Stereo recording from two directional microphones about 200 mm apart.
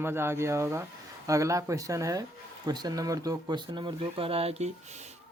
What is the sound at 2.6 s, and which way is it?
Mantra, 20° right (ahead or behind).